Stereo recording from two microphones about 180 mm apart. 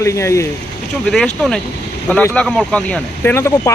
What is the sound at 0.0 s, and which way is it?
Speech, 15° left (ahead or behind).